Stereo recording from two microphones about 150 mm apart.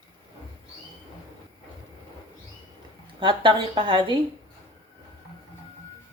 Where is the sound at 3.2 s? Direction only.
30° right (ahead or behind).